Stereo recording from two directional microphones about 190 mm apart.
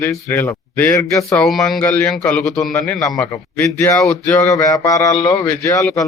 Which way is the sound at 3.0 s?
15° left (ahead or behind).